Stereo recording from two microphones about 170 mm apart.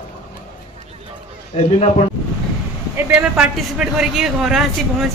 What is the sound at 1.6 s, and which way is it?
Speech, 35° left (ahead or behind).